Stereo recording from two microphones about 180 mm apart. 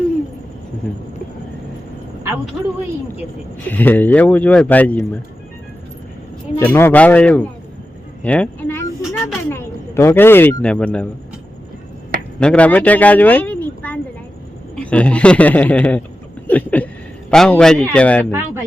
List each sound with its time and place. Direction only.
3.7 s speech: 10° left (ahead or behind)
6.6 s speech: 10° left (ahead or behind)
8.2 s a sound: 5° left (ahead or behind)
12.4 s a man's voice: 5° left (ahead or behind)
18.3 s speech: 15° right (ahead or behind)